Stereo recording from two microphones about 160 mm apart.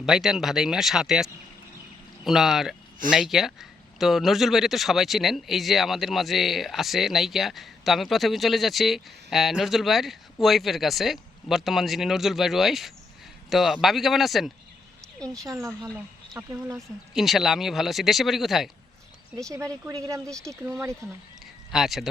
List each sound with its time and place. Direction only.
0.0 s speech: centre (ahead or behind)
15.3 s a woman's voice: 20° right (ahead or behind)
15.8 s speech: centre (ahead or behind)
16.5 s a woman's voice: 20° right (ahead or behind)
17.2 s speech: centre (ahead or behind)
19.4 s a woman's voice: 20° right (ahead or behind)
21.7 s speech: centre (ahead or behind)